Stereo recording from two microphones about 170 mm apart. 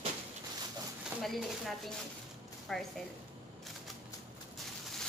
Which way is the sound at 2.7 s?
Centre (ahead or behind).